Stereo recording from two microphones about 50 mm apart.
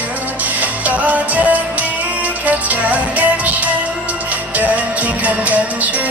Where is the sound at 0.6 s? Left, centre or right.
Right.